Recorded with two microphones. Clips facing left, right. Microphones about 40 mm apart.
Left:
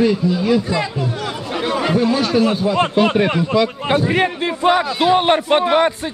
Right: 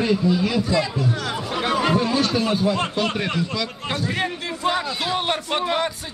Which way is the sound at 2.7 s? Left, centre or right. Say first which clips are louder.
Left 8 dB; left.